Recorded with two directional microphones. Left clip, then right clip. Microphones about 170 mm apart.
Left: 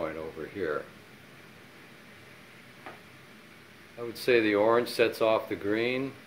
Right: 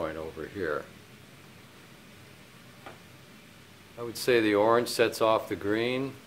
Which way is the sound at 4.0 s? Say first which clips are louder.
Even; 10° right (ahead or behind).